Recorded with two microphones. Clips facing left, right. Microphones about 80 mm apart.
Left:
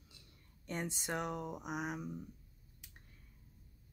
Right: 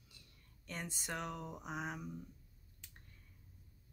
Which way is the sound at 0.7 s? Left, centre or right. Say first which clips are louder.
Left 5 dB; left.